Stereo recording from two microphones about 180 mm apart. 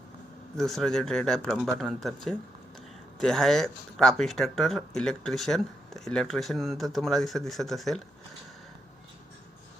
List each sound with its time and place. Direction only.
0.5 s speech: centre (ahead or behind)